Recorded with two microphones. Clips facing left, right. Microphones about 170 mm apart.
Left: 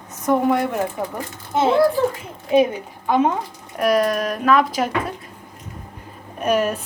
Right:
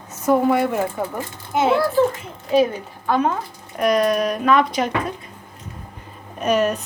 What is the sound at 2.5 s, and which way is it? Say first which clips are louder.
Speech: left 1 dB; 15° left (ahead or behind).